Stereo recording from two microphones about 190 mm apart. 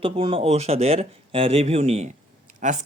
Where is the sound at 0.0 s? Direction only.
30° right (ahead or behind).